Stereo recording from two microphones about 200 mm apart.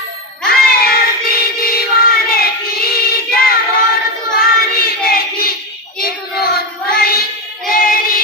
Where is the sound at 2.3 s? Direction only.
50° left (ahead or behind).